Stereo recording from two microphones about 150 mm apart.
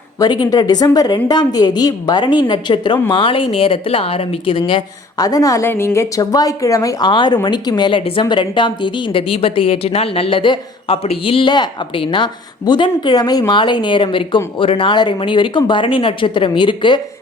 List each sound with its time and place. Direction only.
0.2 s a woman's voice: 30° left (ahead or behind)